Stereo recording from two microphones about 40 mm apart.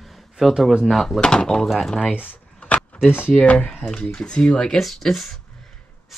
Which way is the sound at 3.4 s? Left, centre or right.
Left.